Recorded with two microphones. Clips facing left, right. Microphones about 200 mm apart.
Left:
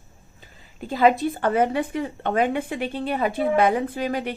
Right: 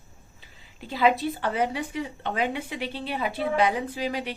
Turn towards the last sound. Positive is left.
turn(degrees=50)  # may be behind; listen again after turning